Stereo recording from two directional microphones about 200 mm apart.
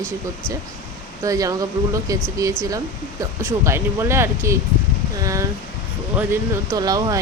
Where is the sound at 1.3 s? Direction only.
15° right (ahead or behind).